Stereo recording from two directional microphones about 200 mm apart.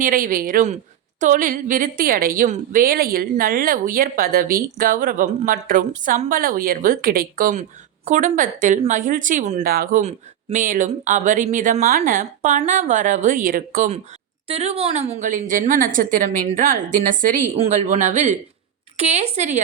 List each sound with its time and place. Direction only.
0.0 s a woman's voice: 45° right (ahead or behind)
9.6 s speech: 45° right (ahead or behind)
14.4 s speech: 30° right (ahead or behind)